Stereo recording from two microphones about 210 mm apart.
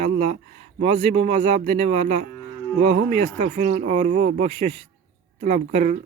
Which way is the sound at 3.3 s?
35° right (ahead or behind).